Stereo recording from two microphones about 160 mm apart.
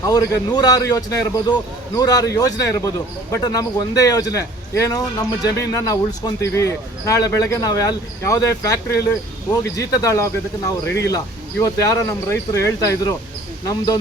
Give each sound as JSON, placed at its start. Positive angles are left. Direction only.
{"t": 0.0, "sound": "speech", "side_deg": 20}